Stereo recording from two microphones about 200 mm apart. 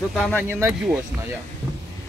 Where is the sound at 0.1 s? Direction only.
5° left (ahead or behind).